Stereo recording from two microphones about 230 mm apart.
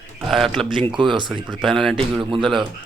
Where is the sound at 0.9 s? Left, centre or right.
Right.